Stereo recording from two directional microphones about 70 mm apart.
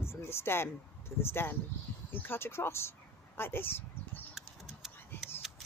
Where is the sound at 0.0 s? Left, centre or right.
Left.